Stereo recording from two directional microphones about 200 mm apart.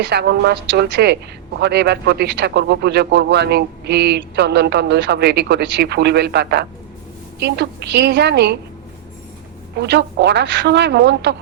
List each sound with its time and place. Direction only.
0.0 s speech: 55° right (ahead or behind)
9.7 s speech: 60° right (ahead or behind)